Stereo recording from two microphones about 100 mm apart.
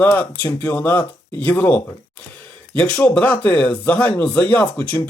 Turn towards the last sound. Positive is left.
turn(degrees=15)  # may be behind; listen again after turning